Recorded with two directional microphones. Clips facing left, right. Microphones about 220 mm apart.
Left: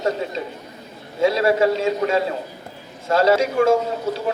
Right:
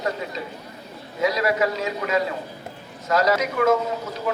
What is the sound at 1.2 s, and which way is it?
A man's voice, 30° left (ahead or behind).